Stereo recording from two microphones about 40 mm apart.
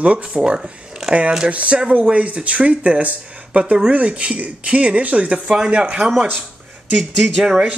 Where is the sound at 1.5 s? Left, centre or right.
Right.